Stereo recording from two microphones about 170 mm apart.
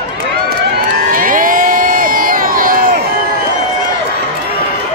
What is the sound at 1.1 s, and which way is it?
Crowd, 50° right (ahead or behind).